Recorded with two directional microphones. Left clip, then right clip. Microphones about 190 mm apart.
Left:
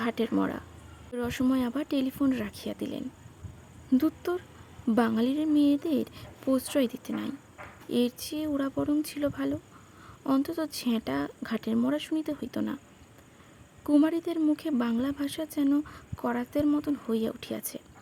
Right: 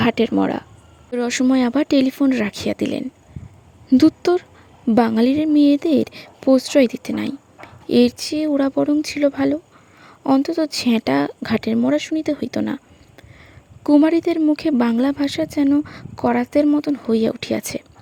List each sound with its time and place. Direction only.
0.0 s speech: 30° right (ahead or behind)
13.8 s speech: 30° right (ahead or behind)